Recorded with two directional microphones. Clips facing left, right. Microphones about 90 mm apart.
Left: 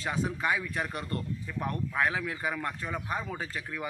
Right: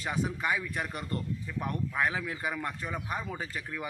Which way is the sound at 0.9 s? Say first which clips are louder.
Even; 10° right (ahead or behind).